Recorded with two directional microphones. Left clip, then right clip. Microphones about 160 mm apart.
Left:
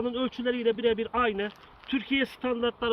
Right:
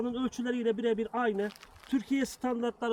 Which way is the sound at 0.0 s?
40° right (ahead or behind).